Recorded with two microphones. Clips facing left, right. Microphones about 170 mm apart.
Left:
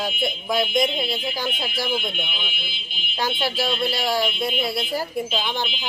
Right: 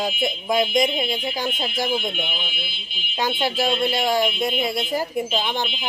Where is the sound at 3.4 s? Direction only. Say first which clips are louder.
Right 3 dB; 20° right (ahead or behind).